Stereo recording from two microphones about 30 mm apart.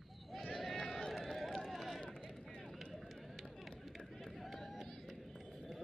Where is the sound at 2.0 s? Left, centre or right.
Left.